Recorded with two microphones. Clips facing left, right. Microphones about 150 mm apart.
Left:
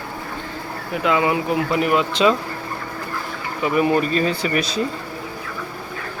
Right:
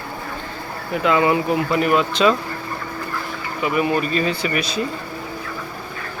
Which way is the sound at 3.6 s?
35° left (ahead or behind).